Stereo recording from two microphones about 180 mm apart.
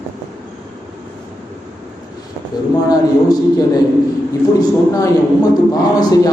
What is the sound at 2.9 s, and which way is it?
Speech, 20° left (ahead or behind).